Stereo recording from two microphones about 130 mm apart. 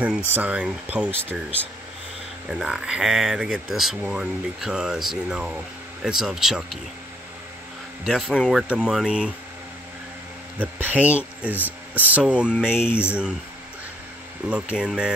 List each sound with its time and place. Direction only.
0.3 s speech: 10° right (ahead or behind)
2.5 s speech: 5° right (ahead or behind)
8.0 s speech: 5° left (ahead or behind)
8.5 s speech: 5° right (ahead or behind)
10.6 s speech: 10° right (ahead or behind)
12.8 s speech: 15° left (ahead or behind)
14.5 s speech: 5° right (ahead or behind)